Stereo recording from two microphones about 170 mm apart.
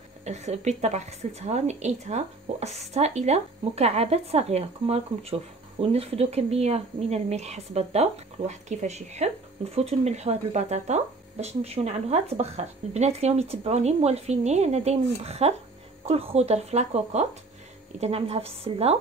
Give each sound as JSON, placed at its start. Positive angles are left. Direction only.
{"t": 0.2, "sound": "a woman's voice", "side_deg": -40}